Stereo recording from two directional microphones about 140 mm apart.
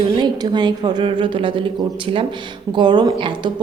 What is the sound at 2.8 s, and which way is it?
Speech, 35° right (ahead or behind).